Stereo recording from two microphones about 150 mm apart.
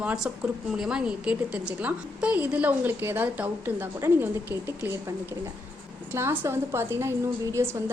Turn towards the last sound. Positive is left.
turn(degrees=-15)  # may be behind; listen again after turning